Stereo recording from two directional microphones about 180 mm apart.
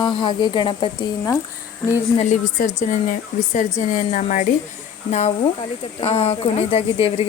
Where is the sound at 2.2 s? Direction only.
40° left (ahead or behind).